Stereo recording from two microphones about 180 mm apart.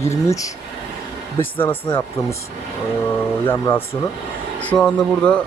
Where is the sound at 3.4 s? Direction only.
10° left (ahead or behind).